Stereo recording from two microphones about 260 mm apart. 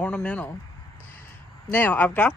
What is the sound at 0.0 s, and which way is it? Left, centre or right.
Speech, centre.